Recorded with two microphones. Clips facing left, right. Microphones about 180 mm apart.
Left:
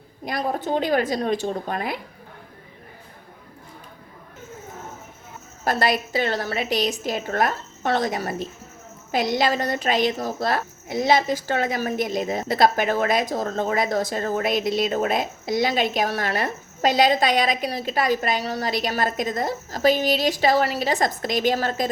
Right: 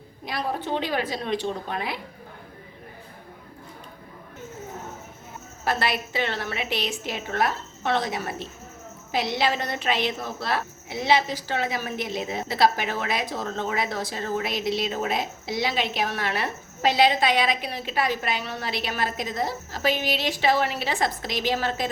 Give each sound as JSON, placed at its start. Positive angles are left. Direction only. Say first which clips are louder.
{"t": 0.3, "sound": "speech", "louder": "left 3 dB", "side_deg": 45}
{"t": 5.6, "sound": "a woman's voice", "louder": "left 4 dB", "side_deg": 40}